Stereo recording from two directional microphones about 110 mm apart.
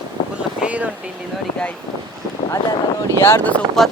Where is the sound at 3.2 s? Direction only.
20° left (ahead or behind).